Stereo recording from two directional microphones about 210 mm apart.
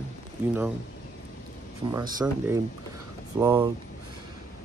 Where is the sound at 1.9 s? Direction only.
15° right (ahead or behind).